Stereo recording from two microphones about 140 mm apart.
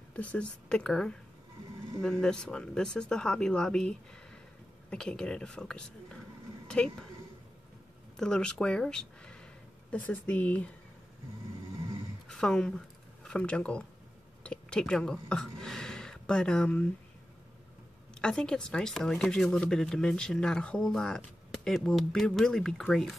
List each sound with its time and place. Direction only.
0.1 s speech: 10° left (ahead or behind)
8.2 s speech: 5° left (ahead or behind)
12.3 s speech: 5° left (ahead or behind)
18.2 s speech: 5° left (ahead or behind)